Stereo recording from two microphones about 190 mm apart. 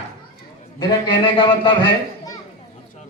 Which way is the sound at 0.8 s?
20° left (ahead or behind).